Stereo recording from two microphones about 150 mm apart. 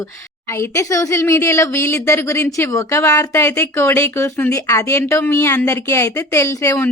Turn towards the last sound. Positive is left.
turn(degrees=20)  # may be behind; listen again after turning